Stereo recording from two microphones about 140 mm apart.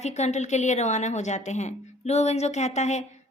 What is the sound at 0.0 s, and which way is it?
A woman's voice, 55° left (ahead or behind).